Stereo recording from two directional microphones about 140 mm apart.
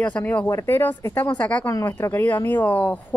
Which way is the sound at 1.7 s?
20° left (ahead or behind).